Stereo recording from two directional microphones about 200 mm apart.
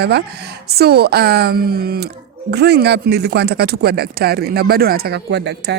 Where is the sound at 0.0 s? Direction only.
55° right (ahead or behind).